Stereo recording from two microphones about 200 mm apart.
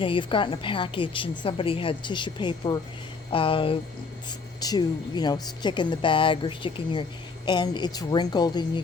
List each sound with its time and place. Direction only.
0.0 s a woman's voice: 25° left (ahead or behind)